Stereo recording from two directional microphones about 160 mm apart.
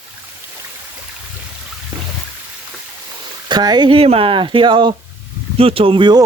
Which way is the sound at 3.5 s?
25° right (ahead or behind).